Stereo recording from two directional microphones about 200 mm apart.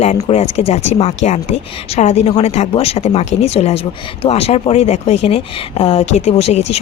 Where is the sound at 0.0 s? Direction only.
30° left (ahead or behind).